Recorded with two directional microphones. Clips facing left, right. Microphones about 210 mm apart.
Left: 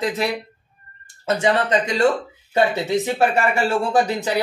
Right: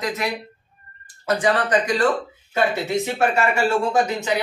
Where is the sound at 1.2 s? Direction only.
25° left (ahead or behind).